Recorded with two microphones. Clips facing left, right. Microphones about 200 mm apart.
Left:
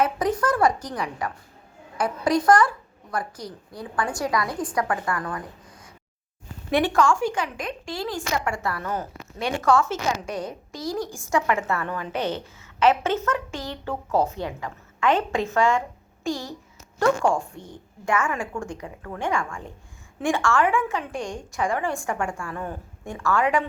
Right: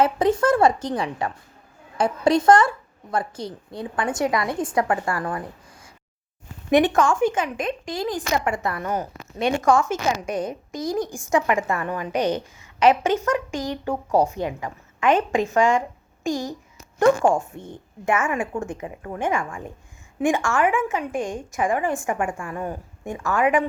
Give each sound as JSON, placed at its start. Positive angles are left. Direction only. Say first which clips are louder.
{"t": 0.0, "sound": "a woman's voice", "louder": "right 4 dB", "side_deg": -25}
{"t": 6.7, "sound": "a woman's voice", "louder": "right 3 dB", "side_deg": -20}